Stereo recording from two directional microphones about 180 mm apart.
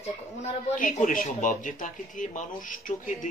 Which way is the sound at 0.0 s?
40° left (ahead or behind).